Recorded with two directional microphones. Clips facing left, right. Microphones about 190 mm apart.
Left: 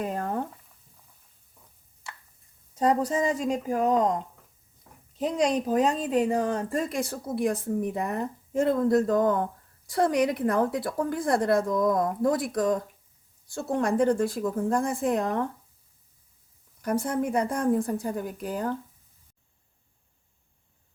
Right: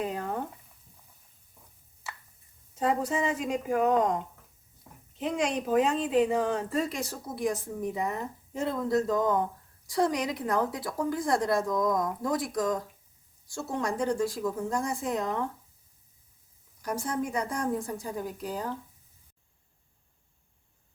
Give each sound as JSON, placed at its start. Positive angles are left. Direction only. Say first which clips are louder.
{"t": 2.7, "sound": "speech", "louder": "left 4 dB", "side_deg": 40}
{"t": 4.9, "sound": "a sound", "louder": "right 2 dB", "side_deg": -5}
{"t": 5.2, "sound": "a woman's voice", "louder": "left 4 dB", "side_deg": 40}
{"t": 16.8, "sound": "a woman's voice", "louder": "left 5 dB", "side_deg": 60}